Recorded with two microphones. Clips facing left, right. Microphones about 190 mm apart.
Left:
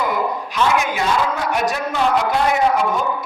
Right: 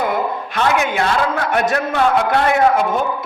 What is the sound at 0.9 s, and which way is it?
A man's voice, 60° right (ahead or behind).